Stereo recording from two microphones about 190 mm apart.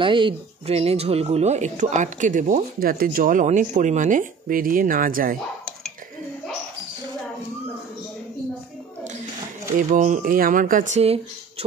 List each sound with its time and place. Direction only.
0.0 s speech: 25° right (ahead or behind); by 5.8 s 50° right (ahead or behind)
9.8 s speech: 40° right (ahead or behind)